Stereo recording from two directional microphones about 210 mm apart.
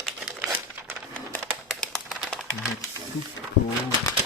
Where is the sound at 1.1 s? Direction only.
5° left (ahead or behind).